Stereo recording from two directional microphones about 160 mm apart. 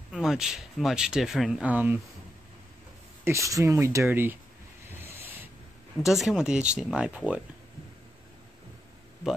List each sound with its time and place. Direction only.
0.1 s speech: 5° right (ahead or behind)
3.3 s speech: 20° right (ahead or behind)
4.8 s a sound: 15° right (ahead or behind)
6.0 s speech: centre (ahead or behind)